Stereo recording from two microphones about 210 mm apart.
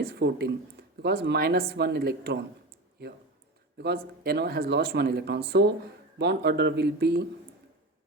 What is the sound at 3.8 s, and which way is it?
Speech, 50° right (ahead or behind).